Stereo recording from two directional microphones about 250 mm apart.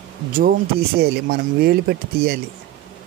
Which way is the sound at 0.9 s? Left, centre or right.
Right.